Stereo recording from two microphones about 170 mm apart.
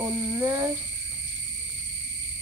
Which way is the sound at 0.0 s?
20° right (ahead or behind).